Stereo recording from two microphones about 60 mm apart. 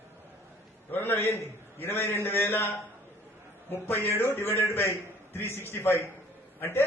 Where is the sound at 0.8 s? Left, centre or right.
Left.